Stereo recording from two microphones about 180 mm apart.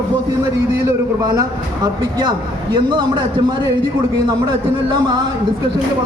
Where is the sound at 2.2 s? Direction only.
25° right (ahead or behind).